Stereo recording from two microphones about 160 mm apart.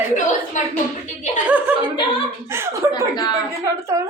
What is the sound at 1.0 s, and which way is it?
Speech, 50° left (ahead or behind).